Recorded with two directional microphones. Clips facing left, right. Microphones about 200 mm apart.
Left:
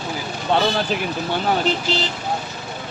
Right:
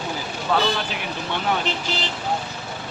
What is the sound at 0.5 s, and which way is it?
Speech, 25° left (ahead or behind).